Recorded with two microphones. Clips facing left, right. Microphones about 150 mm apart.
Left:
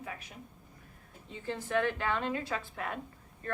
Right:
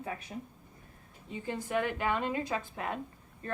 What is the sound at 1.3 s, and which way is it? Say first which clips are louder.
A woman's voice: even; 15° right (ahead or behind).